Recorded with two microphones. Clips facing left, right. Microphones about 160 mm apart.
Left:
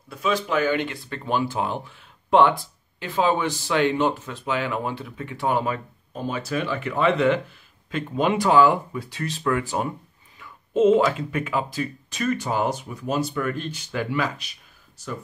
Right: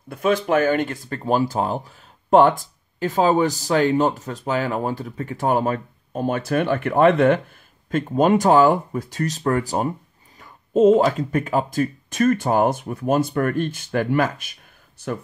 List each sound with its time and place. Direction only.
0.1 s speech: 50° right (ahead or behind)